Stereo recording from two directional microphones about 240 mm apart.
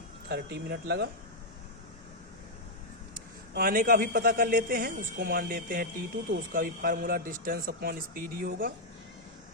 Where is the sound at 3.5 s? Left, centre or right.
Right.